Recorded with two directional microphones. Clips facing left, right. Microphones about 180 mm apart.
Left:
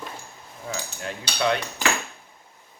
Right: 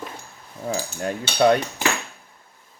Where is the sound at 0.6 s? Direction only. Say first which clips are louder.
Right 7 dB; 40° right (ahead or behind).